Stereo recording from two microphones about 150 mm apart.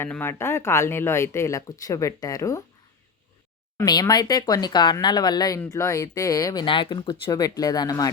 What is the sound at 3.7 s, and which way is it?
Speech, 25° left (ahead or behind).